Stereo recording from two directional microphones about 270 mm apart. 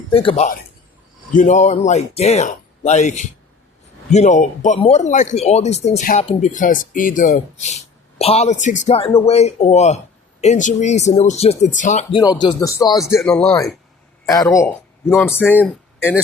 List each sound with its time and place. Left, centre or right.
0.1 s speech: centre
12.2 s speech: centre
13.0 s speech: centre
15.6 s a sound: centre